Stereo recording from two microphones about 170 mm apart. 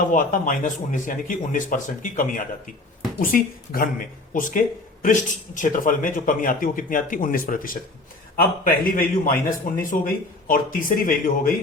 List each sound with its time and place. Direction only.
0.1 s a man's voice: 50° left (ahead or behind)